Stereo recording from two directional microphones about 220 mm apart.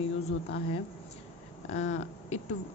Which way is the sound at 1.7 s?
30° left (ahead or behind).